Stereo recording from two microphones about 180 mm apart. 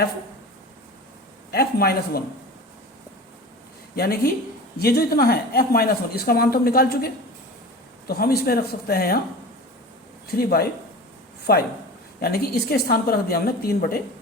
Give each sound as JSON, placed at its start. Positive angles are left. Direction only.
{"t": 1.5, "sound": "speech", "side_deg": 60}
{"t": 3.9, "sound": "speech", "side_deg": 60}
{"t": 10.3, "sound": "speech", "side_deg": 60}